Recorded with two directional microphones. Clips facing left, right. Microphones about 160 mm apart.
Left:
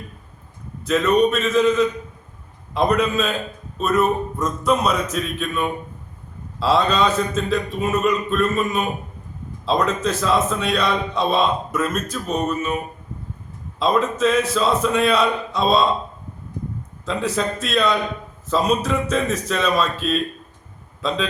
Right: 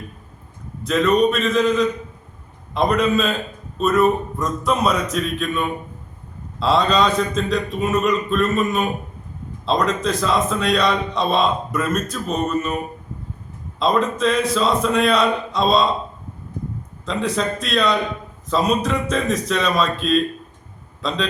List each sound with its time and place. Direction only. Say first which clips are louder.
0.9 s a man's voice: even; centre (ahead or behind)
13.7 s a man's voice: even; 5° left (ahead or behind)
17.1 s a man's voice: right 1 dB; 5° left (ahead or behind)